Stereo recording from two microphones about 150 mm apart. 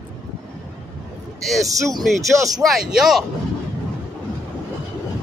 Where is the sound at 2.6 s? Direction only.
Centre (ahead or behind).